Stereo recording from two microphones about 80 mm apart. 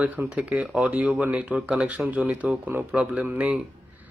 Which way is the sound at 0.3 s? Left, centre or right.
Centre.